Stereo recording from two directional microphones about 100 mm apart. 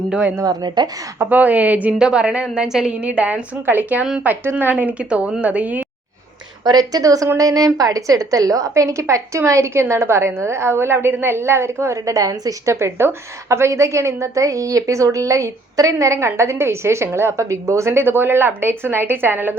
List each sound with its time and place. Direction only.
0.1 s a woman's voice: 10° right (ahead or behind)
0.4 s a woman's voice: 45° right (ahead or behind)
1.2 s a woman's voice: 15° right (ahead or behind)
6.7 s a woman's voice: 40° right (ahead or behind); by 19.5 s 20° right (ahead or behind)